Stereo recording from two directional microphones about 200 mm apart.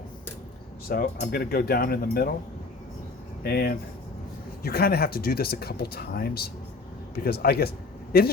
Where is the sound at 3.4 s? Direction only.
50° left (ahead or behind).